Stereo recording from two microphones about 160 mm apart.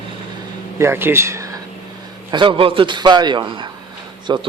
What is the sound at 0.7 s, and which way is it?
Speech, 15° right (ahead or behind).